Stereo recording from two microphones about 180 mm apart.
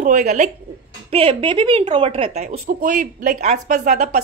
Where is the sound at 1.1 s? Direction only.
30° right (ahead or behind).